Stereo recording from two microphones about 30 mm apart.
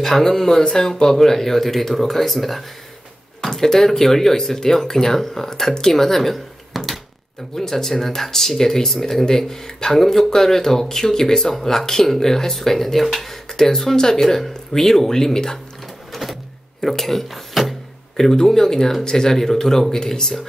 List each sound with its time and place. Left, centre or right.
0.0 s speech: centre
14.2 s speech: centre
16.1 s a sound: centre
16.8 s speech: centre
18.1 s speech: centre